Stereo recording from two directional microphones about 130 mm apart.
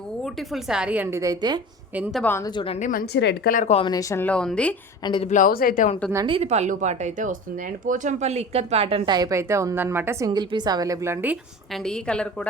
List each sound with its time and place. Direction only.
0.3 s a woman's voice: centre (ahead or behind); by 1.6 s 30° right (ahead or behind)
1.9 s speech: 10° right (ahead or behind)
2.4 s a woman's voice: 40° left (ahead or behind)
2.7 s a woman's voice: 80° left
3.8 s a woman's voice: 35° left (ahead or behind)
4.1 s a woman's voice: 10° left (ahead or behind)
5.3 s speech: 85° left
6.2 s speech: 45° right (ahead or behind)
6.5 s speech: 70° right (ahead or behind); by 9.1 s 45° right (ahead or behind)
9.1 s a woman's voice: 25° right (ahead or behind)
11.7 s a woman's voice: 5° left (ahead or behind)